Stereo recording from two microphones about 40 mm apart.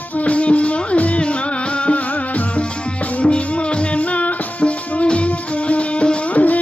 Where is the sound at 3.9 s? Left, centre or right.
Left.